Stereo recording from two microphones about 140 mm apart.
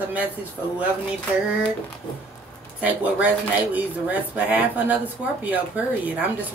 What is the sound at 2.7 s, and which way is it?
A woman's voice, 10° right (ahead or behind).